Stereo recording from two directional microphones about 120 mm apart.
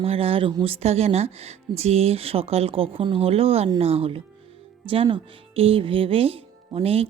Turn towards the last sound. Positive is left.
turn(degrees=-55)  # may be behind; listen again after turning